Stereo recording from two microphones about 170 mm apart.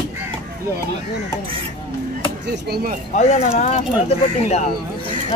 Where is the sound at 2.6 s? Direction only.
70° right (ahead or behind).